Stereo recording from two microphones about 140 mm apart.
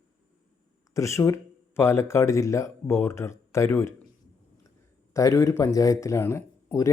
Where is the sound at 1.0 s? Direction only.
20° left (ahead or behind).